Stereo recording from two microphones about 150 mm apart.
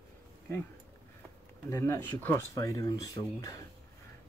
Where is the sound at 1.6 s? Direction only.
20° left (ahead or behind).